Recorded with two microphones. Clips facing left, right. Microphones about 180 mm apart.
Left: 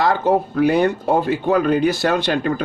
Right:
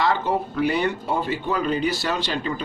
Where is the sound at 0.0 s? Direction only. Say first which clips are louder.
Left 5 dB; 45° left (ahead or behind).